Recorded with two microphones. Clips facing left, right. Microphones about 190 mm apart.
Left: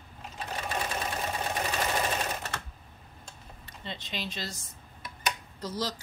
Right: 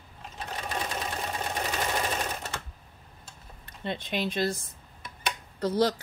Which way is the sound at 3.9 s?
55° right (ahead or behind).